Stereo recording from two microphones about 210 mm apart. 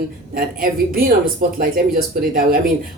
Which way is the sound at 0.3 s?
45° right (ahead or behind).